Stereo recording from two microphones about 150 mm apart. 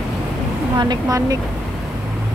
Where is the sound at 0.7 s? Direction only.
25° right (ahead or behind).